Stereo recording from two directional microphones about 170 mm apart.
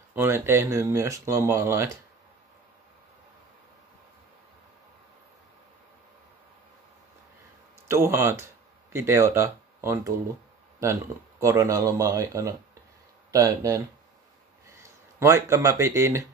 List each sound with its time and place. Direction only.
0.1 s speech: 15° right (ahead or behind)
7.9 s speech: 15° right (ahead or behind)